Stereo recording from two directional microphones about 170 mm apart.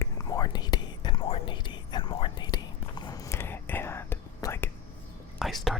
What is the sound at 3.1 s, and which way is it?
Whispering, 15° left (ahead or behind).